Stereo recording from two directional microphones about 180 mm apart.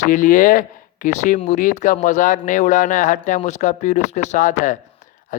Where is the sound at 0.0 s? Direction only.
45° left (ahead or behind).